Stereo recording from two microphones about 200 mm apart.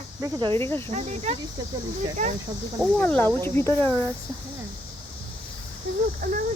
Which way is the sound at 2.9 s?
10° left (ahead or behind).